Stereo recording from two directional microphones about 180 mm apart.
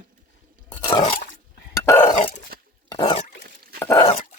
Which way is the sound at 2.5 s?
55° right (ahead or behind).